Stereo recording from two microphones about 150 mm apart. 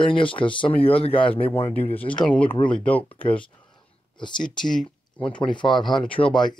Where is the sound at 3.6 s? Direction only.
30° left (ahead or behind).